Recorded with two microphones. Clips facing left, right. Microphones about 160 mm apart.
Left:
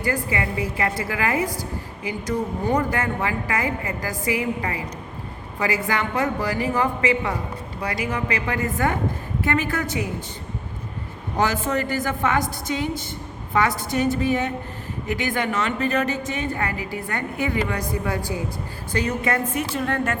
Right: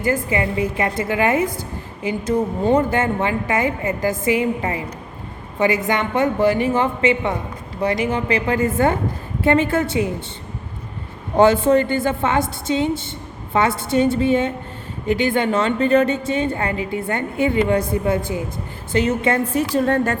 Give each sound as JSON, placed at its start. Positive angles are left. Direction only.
{"t": 0.0, "sound": "a woman's voice", "side_deg": -25}
{"t": 11.3, "sound": "a woman's voice", "side_deg": -30}